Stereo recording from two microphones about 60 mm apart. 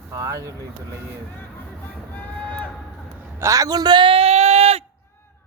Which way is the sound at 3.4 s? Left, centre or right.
Right.